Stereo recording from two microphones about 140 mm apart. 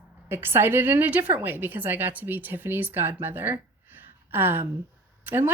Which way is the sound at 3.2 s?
15° right (ahead or behind).